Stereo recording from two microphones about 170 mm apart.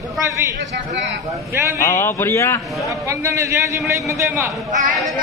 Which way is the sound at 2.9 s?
20° right (ahead or behind).